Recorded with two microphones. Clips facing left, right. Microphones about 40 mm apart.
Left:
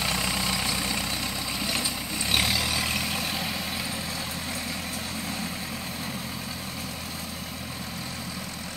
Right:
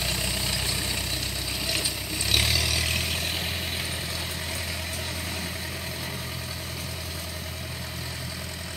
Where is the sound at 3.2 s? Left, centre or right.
Right.